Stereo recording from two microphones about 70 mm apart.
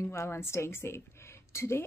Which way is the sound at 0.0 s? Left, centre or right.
Left.